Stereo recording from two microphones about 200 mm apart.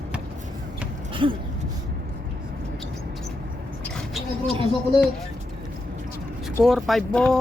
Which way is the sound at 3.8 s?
Centre (ahead or behind).